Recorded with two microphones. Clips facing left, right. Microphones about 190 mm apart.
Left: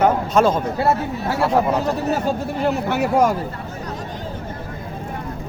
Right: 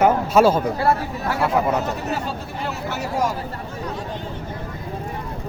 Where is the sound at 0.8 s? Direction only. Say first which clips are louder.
Left 1 dB; 25° left (ahead or behind).